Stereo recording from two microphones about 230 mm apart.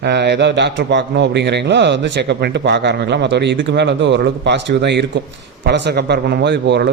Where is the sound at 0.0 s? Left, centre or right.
Right.